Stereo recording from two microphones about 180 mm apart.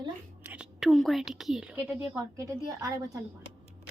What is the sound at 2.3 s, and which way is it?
Speech, 20° right (ahead or behind).